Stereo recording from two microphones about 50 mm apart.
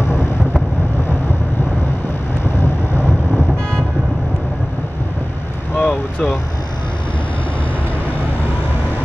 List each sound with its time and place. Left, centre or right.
5.8 s vehicle: left